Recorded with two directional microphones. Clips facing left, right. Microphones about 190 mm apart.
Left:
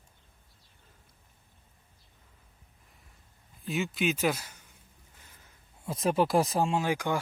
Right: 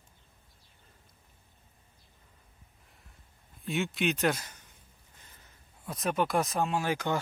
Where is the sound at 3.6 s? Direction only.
Centre (ahead or behind).